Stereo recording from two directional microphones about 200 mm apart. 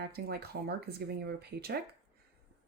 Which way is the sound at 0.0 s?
50° right (ahead or behind).